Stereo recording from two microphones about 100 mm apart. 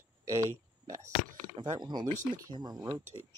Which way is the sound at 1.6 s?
45° right (ahead or behind).